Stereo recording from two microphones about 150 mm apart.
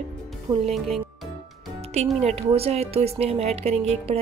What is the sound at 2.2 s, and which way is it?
Speech, 45° right (ahead or behind).